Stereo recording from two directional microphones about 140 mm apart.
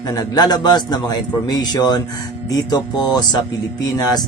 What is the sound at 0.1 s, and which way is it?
A man's voice, 30° left (ahead or behind).